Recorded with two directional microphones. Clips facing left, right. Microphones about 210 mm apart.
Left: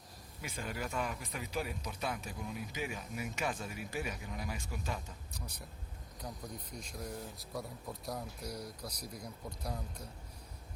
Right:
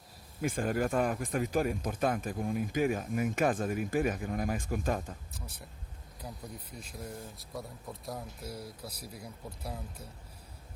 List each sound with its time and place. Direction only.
0.4 s speech: 50° right (ahead or behind)
5.3 s speech: centre (ahead or behind)